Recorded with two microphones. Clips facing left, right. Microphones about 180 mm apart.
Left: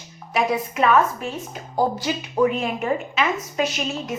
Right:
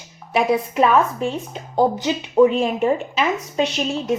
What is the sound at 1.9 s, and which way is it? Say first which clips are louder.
A woman's voice: right 6 dB; 20° right (ahead or behind).